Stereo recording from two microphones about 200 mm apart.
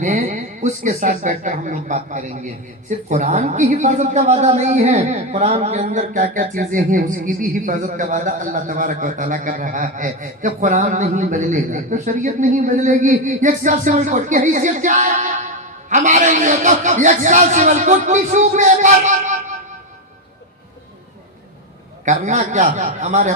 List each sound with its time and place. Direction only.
0.0 s speech: 35° right (ahead or behind)
22.0 s speech: 35° right (ahead or behind)